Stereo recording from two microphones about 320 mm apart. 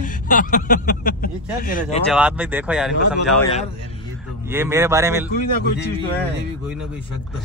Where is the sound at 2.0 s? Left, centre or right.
Centre.